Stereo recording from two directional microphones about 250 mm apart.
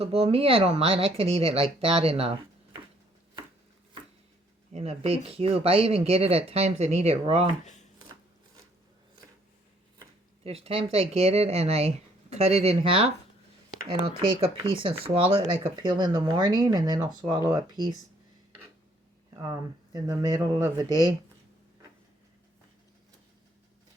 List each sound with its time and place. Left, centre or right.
0.0 s speech: right
4.7 s speech: right
10.4 s speech: right
19.4 s speech: centre